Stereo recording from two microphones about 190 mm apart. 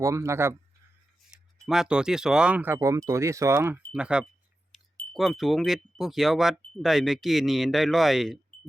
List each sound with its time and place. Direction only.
0.0 s speech: 15° right (ahead or behind)
1.3 s speech: centre (ahead or behind)